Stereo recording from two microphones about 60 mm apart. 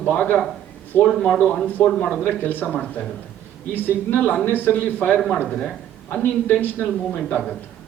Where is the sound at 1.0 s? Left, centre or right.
Centre.